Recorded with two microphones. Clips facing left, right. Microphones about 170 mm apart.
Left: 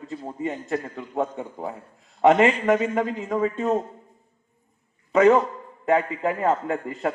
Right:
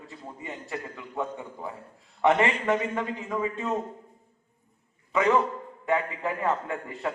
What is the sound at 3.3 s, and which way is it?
Speech, 40° left (ahead or behind).